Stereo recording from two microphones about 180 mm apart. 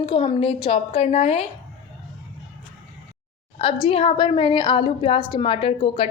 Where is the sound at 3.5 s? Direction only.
30° left (ahead or behind).